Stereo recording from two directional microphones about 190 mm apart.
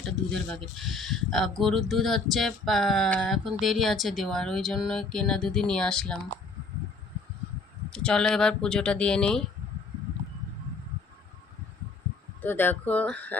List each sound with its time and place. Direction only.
0.0 s speech: centre (ahead or behind)
7.9 s speech: 5° left (ahead or behind)
12.4 s speech: 10° left (ahead or behind)